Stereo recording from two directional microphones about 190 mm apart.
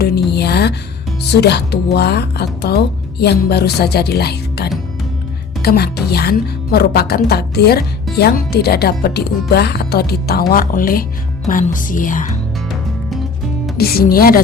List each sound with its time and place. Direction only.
0.0 s a sound: 55° left (ahead or behind)
1.3 s a woman's voice: 60° left (ahead or behind); by 12.4 s 45° left (ahead or behind)
13.7 s speech: 50° left (ahead or behind)